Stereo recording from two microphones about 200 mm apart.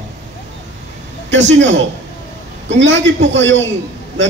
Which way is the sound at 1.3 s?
65° right (ahead or behind).